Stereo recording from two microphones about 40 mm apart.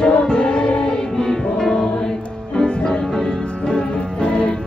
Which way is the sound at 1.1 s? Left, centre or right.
Centre.